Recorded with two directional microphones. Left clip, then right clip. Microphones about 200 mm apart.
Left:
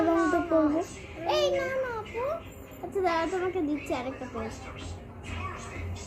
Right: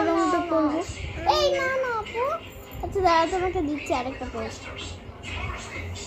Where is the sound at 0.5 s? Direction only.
20° right (ahead or behind).